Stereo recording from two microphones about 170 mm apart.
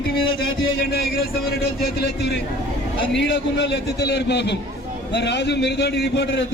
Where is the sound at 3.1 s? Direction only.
90° left.